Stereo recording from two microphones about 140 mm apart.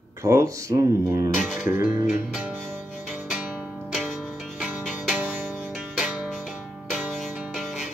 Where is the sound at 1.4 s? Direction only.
5° right (ahead or behind).